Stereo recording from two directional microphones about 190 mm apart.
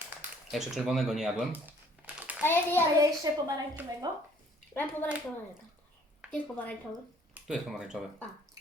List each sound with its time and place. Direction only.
0.1 s a sound: 5° right (ahead or behind)
2.4 s a child's voice: 10° left (ahead or behind)
3.0 s a woman's voice: 20° right (ahead or behind)
4.7 s a child's voice: 10° left (ahead or behind)
6.3 s a child's voice: 5° left (ahead or behind)